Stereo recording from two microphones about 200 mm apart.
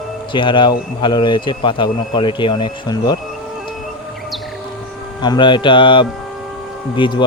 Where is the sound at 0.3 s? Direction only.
25° left (ahead or behind).